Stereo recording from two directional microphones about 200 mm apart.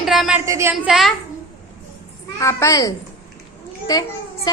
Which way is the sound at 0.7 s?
Centre (ahead or behind).